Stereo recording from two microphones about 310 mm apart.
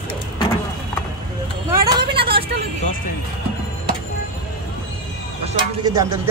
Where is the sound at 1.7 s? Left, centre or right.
Centre.